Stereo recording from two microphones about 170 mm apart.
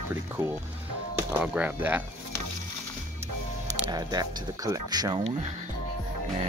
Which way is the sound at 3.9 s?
25° right (ahead or behind).